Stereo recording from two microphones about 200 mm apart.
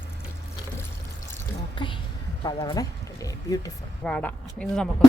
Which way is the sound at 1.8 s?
25° left (ahead or behind).